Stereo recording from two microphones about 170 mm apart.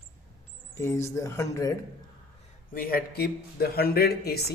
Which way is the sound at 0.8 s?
15° left (ahead or behind).